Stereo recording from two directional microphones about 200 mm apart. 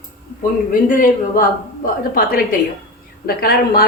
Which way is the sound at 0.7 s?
45° left (ahead or behind).